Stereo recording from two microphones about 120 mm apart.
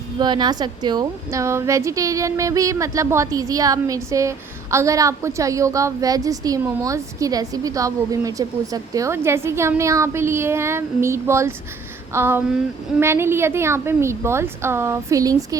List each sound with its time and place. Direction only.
0.2 s a woman's voice: 35° right (ahead or behind)